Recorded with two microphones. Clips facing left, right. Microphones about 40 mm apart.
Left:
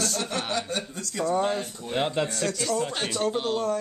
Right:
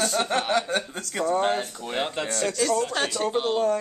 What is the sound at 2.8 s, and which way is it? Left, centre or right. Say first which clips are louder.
Speech: right 3 dB; centre.